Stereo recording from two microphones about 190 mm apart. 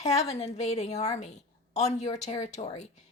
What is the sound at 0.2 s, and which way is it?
A woman's voice, 35° left (ahead or behind).